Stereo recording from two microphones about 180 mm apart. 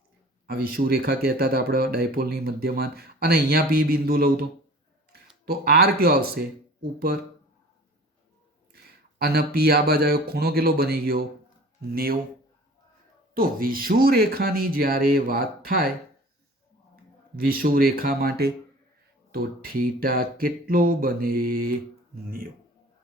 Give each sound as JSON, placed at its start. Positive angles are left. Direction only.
{"t": 0.4, "sound": "speech", "side_deg": -55}
{"t": 5.5, "sound": "speech", "side_deg": -60}
{"t": 8.7, "sound": "speech", "side_deg": -60}
{"t": 13.3, "sound": "speech", "side_deg": -55}
{"t": 17.3, "sound": "speech", "side_deg": -55}
{"t": 19.3, "sound": "a sound", "side_deg": -55}